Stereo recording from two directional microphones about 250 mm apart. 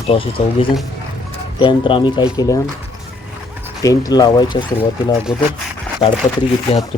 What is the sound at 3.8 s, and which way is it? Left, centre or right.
Speech, centre.